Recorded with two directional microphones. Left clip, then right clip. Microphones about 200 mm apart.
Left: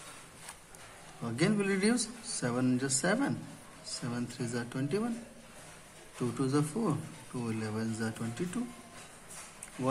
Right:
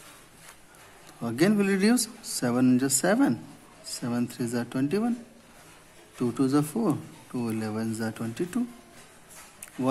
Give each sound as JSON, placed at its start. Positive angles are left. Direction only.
{"t": 1.2, "sound": "speech", "side_deg": -35}
{"t": 6.1, "sound": "speech", "side_deg": -35}